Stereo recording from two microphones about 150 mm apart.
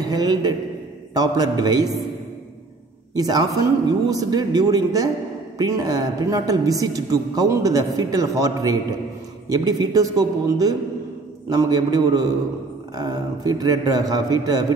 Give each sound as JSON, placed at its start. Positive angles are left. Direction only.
{"t": 0.1, "sound": "a woman's voice", "side_deg": -25}
{"t": 3.2, "sound": "a woman's voice", "side_deg": -25}